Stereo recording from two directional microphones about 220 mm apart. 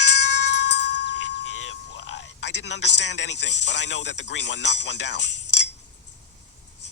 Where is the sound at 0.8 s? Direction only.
50° left (ahead or behind).